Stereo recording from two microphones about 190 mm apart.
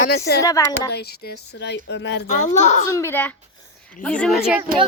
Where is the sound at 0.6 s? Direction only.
15° left (ahead or behind).